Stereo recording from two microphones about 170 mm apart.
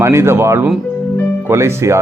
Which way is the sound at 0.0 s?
15° right (ahead or behind).